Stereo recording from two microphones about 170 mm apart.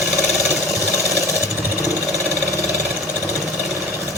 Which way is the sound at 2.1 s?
20° right (ahead or behind).